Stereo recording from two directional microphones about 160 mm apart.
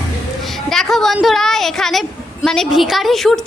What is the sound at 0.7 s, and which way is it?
A woman's voice, centre (ahead or behind).